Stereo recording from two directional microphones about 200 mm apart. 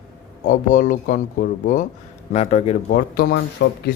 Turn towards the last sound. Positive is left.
turn(degrees=50)  # may be behind; listen again after turning